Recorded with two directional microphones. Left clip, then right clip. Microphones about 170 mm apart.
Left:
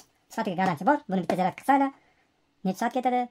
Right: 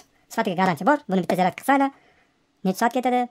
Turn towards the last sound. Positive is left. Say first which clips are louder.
# right 5 dB
turn(degrees=-40)  # may be behind; listen again after turning